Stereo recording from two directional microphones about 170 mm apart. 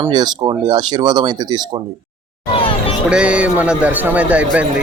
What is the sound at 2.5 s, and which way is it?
Music, 35° left (ahead or behind).